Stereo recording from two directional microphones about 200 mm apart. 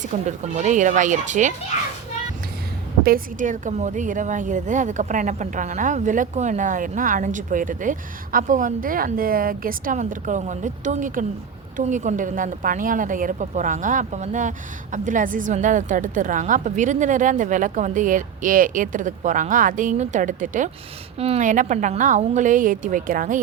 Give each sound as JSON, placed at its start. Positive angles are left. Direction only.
{"t": 0.0, "sound": "a woman's voice", "side_deg": -35}
{"t": 3.0, "sound": "a woman's voice", "side_deg": -45}